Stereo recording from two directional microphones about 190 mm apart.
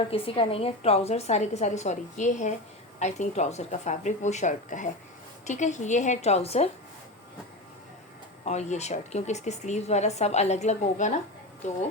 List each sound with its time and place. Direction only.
0.1 s speech: 30° left (ahead or behind)
8.4 s speech: 35° left (ahead or behind)